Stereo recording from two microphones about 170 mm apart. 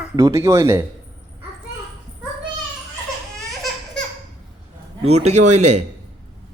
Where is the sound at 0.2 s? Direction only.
20° right (ahead or behind).